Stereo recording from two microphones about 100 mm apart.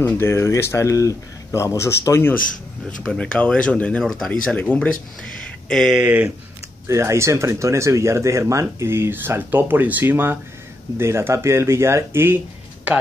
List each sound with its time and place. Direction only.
0.0 s speech: 25° left (ahead or behind)
3.1 s speech: 10° left (ahead or behind)
5.7 s speech: 5° left (ahead or behind)
5.9 s speech: 15° right (ahead or behind)
6.9 s speech: 30° right (ahead or behind)